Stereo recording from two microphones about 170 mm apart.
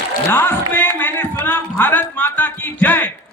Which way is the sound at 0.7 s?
10° left (ahead or behind).